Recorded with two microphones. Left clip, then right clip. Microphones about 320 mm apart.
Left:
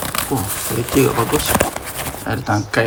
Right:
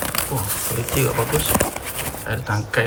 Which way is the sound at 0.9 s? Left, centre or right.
Centre.